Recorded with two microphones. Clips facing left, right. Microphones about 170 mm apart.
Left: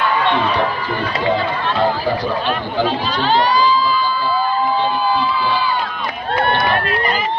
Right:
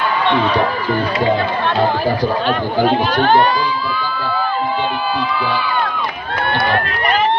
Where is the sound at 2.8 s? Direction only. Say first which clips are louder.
Right 5 dB; 60° right (ahead or behind).